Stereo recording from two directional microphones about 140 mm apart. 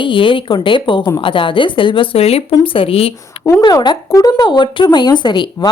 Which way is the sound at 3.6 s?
30° left (ahead or behind).